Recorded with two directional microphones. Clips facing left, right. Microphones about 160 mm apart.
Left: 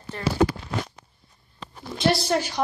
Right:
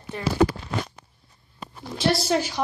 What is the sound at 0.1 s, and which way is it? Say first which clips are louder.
Speech: even; 15° right (ahead or behind).